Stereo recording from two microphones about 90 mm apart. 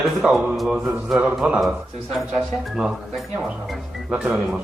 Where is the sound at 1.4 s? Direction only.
15° right (ahead or behind).